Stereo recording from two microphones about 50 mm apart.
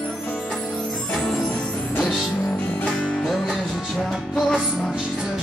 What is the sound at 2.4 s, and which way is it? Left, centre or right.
Music, left.